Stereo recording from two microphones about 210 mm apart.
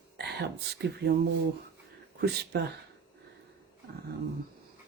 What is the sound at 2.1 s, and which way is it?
Speech, 50° right (ahead or behind).